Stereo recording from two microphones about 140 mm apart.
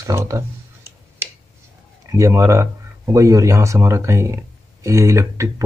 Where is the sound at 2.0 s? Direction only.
20° right (ahead or behind).